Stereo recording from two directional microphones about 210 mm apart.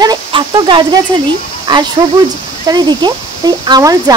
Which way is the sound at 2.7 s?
20° right (ahead or behind).